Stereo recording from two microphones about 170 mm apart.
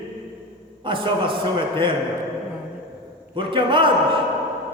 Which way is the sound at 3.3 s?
30° right (ahead or behind).